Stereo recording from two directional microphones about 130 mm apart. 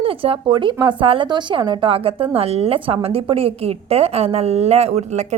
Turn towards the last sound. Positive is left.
turn(degrees=-60)  # may be behind; listen again after turning